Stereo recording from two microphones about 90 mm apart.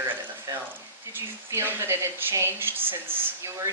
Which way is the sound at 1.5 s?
30° right (ahead or behind).